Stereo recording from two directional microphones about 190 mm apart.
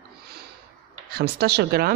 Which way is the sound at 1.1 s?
55° right (ahead or behind).